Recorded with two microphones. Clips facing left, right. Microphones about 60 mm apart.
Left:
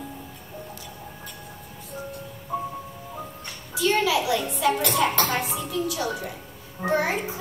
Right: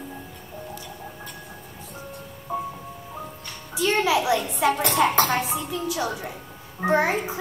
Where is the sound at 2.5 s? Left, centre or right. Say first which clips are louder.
Right 1 dB; right.